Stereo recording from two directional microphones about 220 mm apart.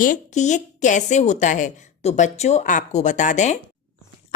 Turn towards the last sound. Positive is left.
turn(degrees=35)  # may be behind; listen again after turning